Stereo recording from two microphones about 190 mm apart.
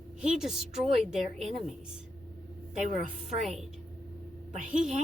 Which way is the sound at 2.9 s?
45° right (ahead or behind).